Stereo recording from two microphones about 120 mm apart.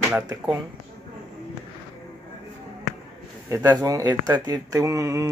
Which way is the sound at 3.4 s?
30° right (ahead or behind).